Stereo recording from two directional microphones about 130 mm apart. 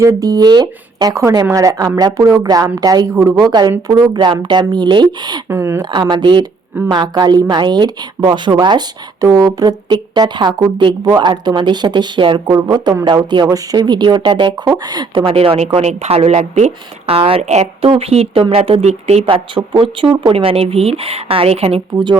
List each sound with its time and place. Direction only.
0.0 s speech: 25° right (ahead or behind)
5.5 s speech: 20° right (ahead or behind)
5.8 s speech: 35° right (ahead or behind); by 17.2 s 60° right (ahead or behind)
17.2 s speech: 45° right (ahead or behind)